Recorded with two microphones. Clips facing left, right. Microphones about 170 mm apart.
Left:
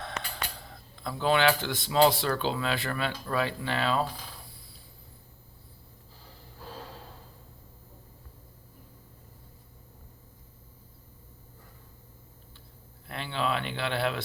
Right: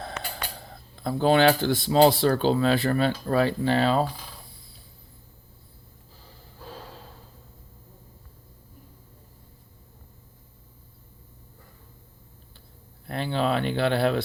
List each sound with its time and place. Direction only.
0.5 s speech: 35° right (ahead or behind)
13.1 s speech: 40° right (ahead or behind)